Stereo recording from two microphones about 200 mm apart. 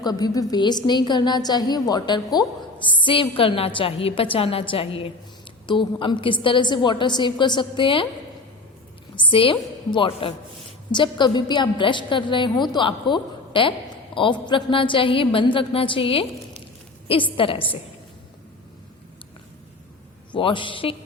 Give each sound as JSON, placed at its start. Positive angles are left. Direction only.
{"t": 0.0, "sound": "a woman's voice", "side_deg": 20}
{"t": 9.1, "sound": "a woman's voice", "side_deg": 25}
{"t": 20.3, "sound": "a woman's voice", "side_deg": 25}